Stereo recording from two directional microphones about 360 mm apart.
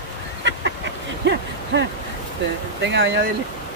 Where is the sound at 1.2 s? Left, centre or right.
Right.